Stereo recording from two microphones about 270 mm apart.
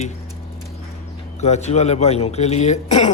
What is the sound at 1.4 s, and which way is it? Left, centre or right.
Speech, left.